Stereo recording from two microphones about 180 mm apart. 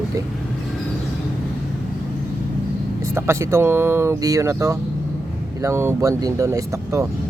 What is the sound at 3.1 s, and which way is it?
Speech, 15° right (ahead or behind).